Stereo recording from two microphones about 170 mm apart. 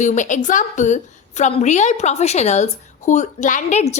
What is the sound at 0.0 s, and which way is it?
A woman's voice, 45° left (ahead or behind).